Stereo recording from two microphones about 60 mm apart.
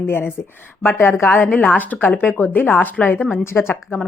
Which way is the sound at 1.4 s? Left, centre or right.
Left.